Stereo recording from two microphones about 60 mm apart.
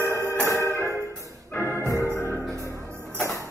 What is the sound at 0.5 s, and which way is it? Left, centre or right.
Music, left.